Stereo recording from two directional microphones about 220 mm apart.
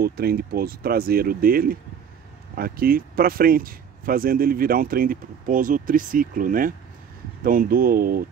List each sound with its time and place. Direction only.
0.0 s speech: 45° right (ahead or behind)